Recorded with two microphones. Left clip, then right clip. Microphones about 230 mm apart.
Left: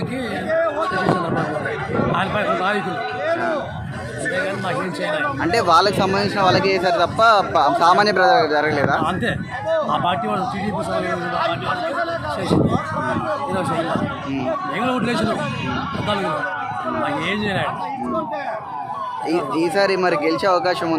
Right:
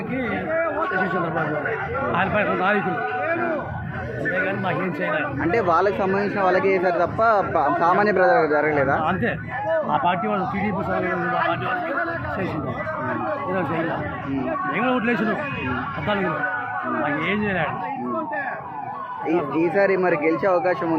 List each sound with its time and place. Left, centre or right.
2.1 s speech: centre
5.1 s speech: centre
14.8 s speech: centre
17.0 s speech: centre
19.3 s speech: centre